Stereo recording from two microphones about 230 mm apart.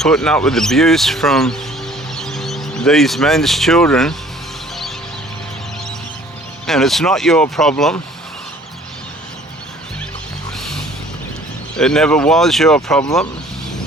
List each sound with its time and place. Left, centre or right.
0.0 s speech: centre
6.7 s speech: centre
11.8 s speech: centre